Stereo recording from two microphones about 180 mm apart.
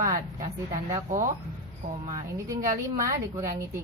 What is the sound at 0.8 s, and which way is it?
A woman's voice, 15° right (ahead or behind).